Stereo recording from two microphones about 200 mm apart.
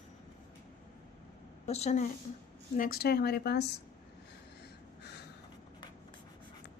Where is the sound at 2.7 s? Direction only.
45° left (ahead or behind).